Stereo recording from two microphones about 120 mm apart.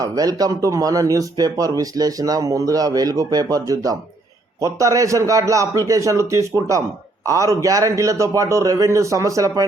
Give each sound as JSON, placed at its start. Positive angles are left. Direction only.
{"t": 0.0, "sound": "a man's voice", "side_deg": -30}